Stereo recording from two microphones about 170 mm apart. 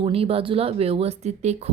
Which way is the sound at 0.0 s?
35° right (ahead or behind).